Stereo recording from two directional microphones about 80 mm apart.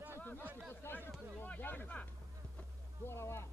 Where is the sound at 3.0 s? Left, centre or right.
Left.